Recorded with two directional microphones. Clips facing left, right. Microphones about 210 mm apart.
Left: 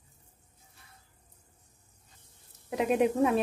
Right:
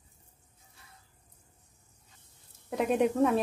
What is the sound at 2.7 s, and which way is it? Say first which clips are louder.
Speech: left 1 dB; 10° left (ahead or behind).